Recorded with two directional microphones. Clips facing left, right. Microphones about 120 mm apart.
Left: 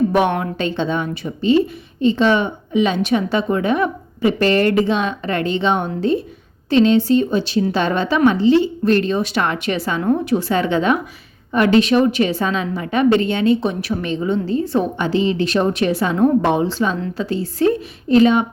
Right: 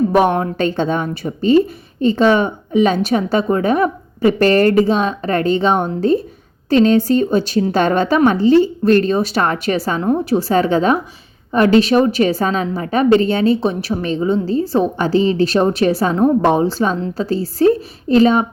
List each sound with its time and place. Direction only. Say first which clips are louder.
0.1 s a woman's voice: right 3 dB; 40° right (ahead or behind)